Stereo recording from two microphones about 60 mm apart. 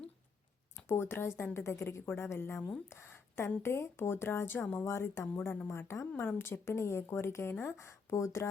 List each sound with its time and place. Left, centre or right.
0.9 s a woman's voice: left
3.1 s a sound: left
3.6 s a woman's voice: left
6.2 s speech: left
6.7 s a woman's voice: left